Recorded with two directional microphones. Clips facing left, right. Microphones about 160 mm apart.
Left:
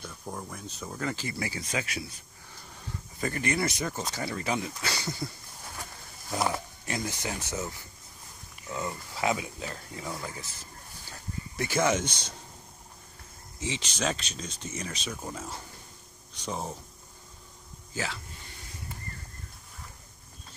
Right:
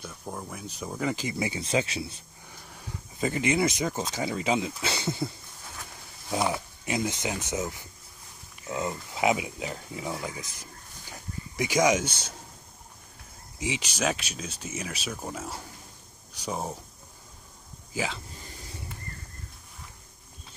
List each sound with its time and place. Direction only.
0.0 s speech: 5° right (ahead or behind); by 5.3 s 20° right (ahead or behind)
6.9 s speech: 20° right (ahead or behind)
13.6 s speech: 10° right (ahead or behind)
17.9 s speech: 15° right (ahead or behind)